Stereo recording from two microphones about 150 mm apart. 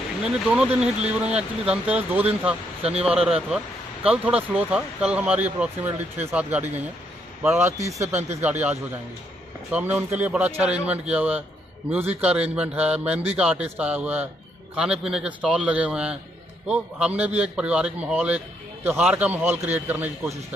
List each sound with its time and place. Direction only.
0.5 s speech: 5° right (ahead or behind)